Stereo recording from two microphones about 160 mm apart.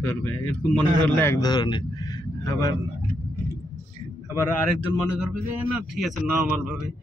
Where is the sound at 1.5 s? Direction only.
25° left (ahead or behind).